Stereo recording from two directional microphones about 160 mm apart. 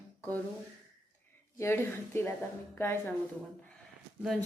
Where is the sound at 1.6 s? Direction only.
15° left (ahead or behind).